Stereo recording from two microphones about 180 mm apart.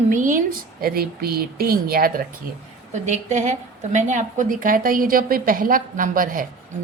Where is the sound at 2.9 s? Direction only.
40° right (ahead or behind).